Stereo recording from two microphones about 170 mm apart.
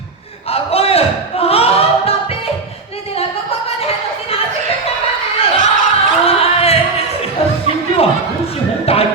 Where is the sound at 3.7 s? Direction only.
35° left (ahead or behind).